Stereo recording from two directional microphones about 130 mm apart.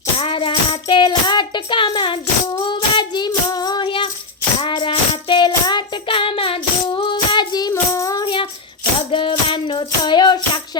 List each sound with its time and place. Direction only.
0.2 s music: 45° left (ahead or behind); by 8.2 s 25° left (ahead or behind)
8.2 s music: 40° left (ahead or behind)